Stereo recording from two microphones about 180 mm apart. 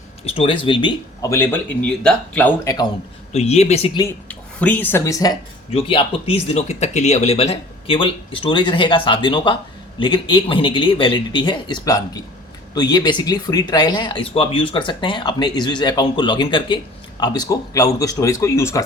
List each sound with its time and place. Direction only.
0.3 s speech: 30° left (ahead or behind)
1.3 s speech: 10° left (ahead or behind)
3.3 s speech: 35° left (ahead or behind)
4.0 s speech: 10° left (ahead or behind)
5.7 s speech: 30° left (ahead or behind); by 18.8 s 15° left (ahead or behind)